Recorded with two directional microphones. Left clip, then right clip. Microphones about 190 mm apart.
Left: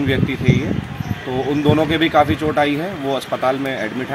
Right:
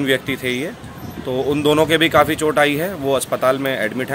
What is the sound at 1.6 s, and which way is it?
Speech, 30° right (ahead or behind).